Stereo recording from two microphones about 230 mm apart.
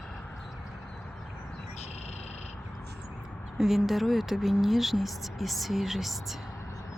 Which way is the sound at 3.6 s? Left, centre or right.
Centre.